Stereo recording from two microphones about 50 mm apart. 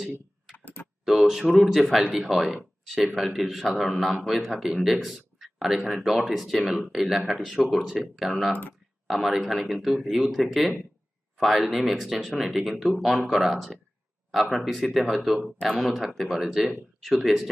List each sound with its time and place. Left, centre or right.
0.5 s typing: left
1.0 s speech: centre
5.0 s a sound: centre
5.9 s speech: centre